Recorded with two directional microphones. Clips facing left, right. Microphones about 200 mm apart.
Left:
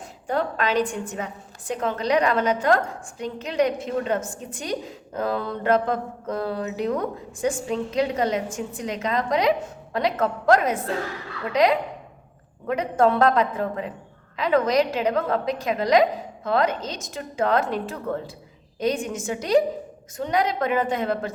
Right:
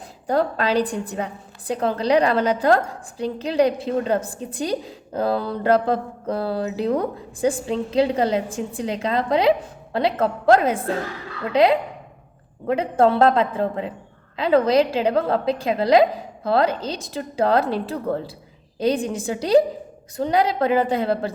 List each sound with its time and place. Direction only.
0.3 s a woman's voice: 35° right (ahead or behind)